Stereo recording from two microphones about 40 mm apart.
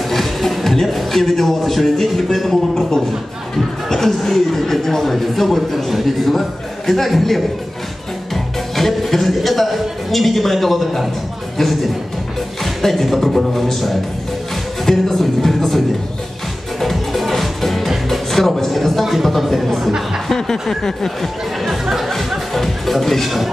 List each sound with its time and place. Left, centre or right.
0.1 s a man's voice: centre
3.9 s speech: centre
14.9 s music: centre
16.8 s music: centre
20.2 s a sound: centre
21.6 s music: centre